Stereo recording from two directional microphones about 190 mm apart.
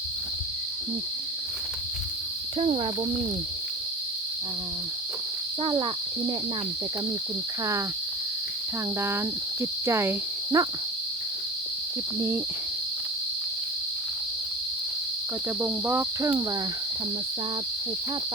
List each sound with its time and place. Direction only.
2.6 s cricket: 30° right (ahead or behind)
5.6 s cricket: 30° right (ahead or behind)
9.0 s speech: 15° right (ahead or behind)
15.6 s speech: 10° right (ahead or behind)